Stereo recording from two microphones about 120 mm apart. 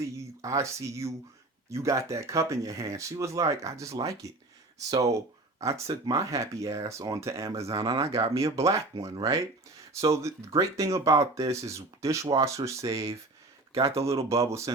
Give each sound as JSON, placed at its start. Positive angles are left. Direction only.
{"t": 0.0, "sound": "speech", "side_deg": -25}
{"t": 14.2, "sound": "speech", "side_deg": -25}